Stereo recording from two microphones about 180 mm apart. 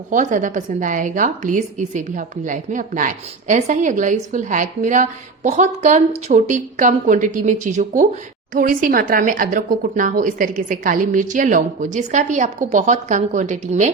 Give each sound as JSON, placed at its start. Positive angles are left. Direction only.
{"t": 0.1, "sound": "a woman's voice", "side_deg": -45}